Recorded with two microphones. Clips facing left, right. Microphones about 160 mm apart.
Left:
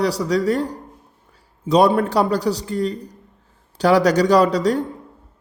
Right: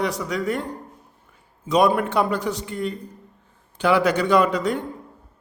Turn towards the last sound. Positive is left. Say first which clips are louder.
# left 4 dB
turn(degrees=35)  # may be behind; listen again after turning